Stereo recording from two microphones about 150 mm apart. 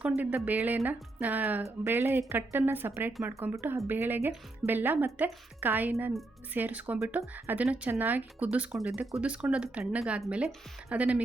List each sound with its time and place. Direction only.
0.1 s speech: 10° right (ahead or behind)